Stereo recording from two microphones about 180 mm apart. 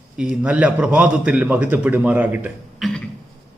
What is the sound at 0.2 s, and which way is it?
A man's voice, 5° right (ahead or behind).